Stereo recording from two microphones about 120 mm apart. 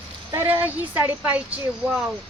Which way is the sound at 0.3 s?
20° right (ahead or behind).